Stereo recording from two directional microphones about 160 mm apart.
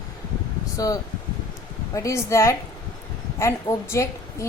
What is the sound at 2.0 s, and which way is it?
A woman's voice, 20° left (ahead or behind).